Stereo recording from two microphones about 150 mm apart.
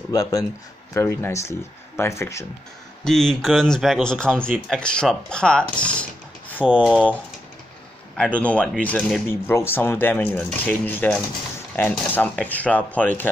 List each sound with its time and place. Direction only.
0.1 s speech: 25° left (ahead or behind)
3.0 s speech: 5° left (ahead or behind)
6.6 s speech: 5° right (ahead or behind)
6.9 s speech: 10° left (ahead or behind)
8.4 s speech: 10° left (ahead or behind)